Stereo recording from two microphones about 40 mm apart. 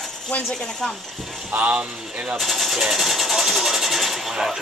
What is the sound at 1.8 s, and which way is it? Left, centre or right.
Speech, right.